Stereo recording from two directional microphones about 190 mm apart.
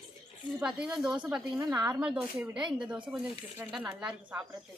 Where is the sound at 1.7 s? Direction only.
10° right (ahead or behind).